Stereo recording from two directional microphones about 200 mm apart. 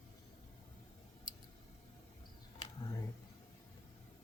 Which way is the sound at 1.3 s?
20° left (ahead or behind).